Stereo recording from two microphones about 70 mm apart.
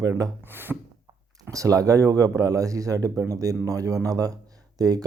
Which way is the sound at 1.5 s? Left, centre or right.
Right.